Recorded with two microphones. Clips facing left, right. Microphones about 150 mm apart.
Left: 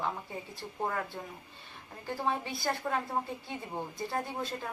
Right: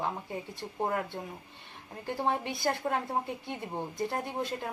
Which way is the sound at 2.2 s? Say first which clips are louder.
Right 3 dB; 25° right (ahead or behind).